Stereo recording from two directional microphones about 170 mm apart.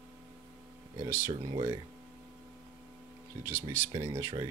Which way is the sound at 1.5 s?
30° right (ahead or behind).